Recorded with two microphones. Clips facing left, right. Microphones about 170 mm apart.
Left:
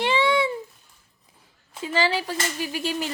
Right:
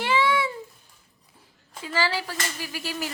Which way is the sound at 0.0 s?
25° left (ahead or behind).